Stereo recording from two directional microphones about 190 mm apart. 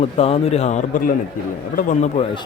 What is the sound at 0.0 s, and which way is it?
A man's voice, 30° left (ahead or behind).